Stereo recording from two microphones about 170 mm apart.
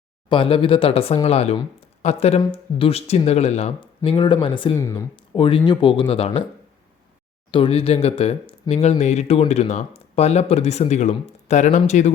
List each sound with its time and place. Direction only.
0.3 s speech: 30° left (ahead or behind)
4.7 s speech: 15° left (ahead or behind)
5.1 s speech: 30° left (ahead or behind)
7.5 s speech: 30° left (ahead or behind)